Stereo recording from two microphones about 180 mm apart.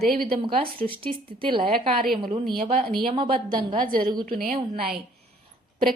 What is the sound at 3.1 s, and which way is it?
Speech, 30° right (ahead or behind).